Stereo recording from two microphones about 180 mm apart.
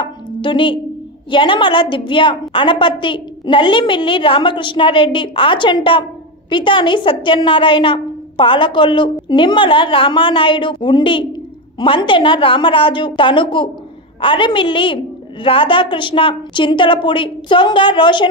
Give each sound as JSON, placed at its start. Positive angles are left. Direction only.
{"t": 0.0, "sound": "music", "side_deg": 25}
{"t": 1.3, "sound": "a woman's voice", "side_deg": 25}